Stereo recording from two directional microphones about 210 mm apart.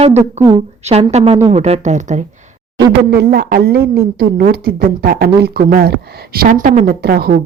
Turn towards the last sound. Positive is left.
turn(degrees=-45)  # may be behind; listen again after turning